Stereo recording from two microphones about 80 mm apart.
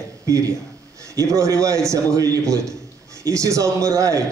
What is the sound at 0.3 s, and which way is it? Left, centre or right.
A man's voice, right.